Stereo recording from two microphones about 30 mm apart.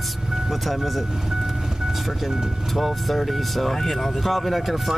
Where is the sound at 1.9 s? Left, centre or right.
Centre.